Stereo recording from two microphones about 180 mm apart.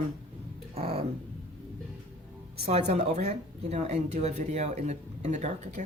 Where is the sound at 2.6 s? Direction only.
35° right (ahead or behind).